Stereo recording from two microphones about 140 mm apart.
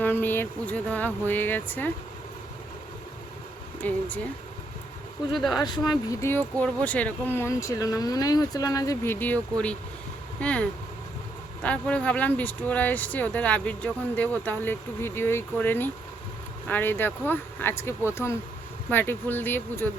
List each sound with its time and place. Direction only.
0.0 s speech: 15° left (ahead or behind)
3.8 s speech: 10° left (ahead or behind)
5.3 s speech: centre (ahead or behind)
6.1 s speech: 15° left (ahead or behind)
9.1 s speech: 10° left (ahead or behind)